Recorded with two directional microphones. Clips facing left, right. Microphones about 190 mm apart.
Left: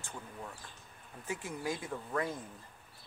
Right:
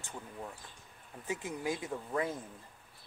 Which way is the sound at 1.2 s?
20° right (ahead or behind).